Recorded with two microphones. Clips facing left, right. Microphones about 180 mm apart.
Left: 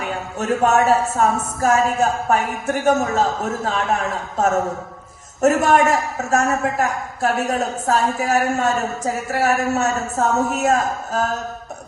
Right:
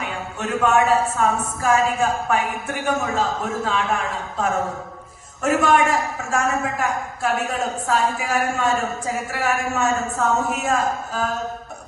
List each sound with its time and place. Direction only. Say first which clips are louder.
0.0 s a man's voice: left 3 dB; 40° left (ahead or behind)